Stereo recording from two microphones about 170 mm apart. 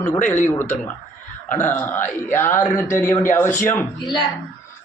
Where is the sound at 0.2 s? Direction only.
45° left (ahead or behind).